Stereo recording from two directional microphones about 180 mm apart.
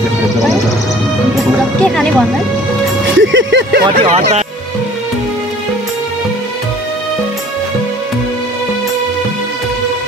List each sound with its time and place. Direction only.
1.8 s speech: centre (ahead or behind)
3.2 s music: 90° right
4.0 s speech: 35° right (ahead or behind)